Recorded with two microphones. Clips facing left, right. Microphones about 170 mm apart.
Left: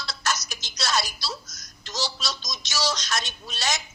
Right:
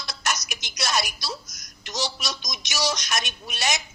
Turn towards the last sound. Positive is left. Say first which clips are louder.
# right 1 dB
turn(degrees=-15)  # may be behind; listen again after turning